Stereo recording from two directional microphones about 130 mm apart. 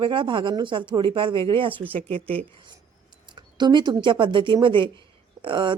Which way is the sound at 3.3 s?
35° right (ahead or behind).